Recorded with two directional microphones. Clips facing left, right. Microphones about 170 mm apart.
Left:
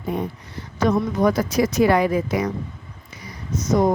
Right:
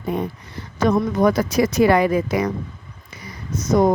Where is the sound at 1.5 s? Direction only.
75° right (ahead or behind).